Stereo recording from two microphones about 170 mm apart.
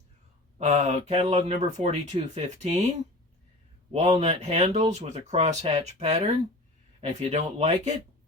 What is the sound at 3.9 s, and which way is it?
Speech, 40° right (ahead or behind).